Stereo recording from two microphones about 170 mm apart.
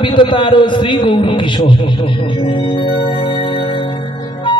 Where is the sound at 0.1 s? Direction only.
30° left (ahead or behind).